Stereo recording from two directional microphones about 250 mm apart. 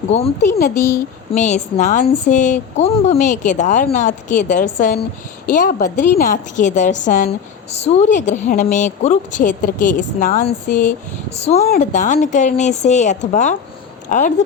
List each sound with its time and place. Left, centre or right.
0.1 s a woman's voice: left